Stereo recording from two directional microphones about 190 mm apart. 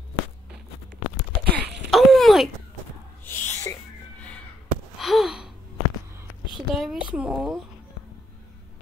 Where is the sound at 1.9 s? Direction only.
Centre (ahead or behind).